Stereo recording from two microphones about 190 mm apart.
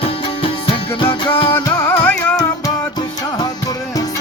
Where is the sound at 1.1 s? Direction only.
25° left (ahead or behind).